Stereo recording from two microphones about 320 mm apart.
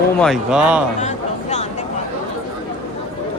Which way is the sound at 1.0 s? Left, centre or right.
Left.